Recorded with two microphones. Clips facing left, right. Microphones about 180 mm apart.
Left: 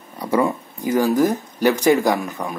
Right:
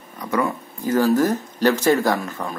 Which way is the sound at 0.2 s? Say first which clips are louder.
Left 3 dB; 30° left (ahead or behind).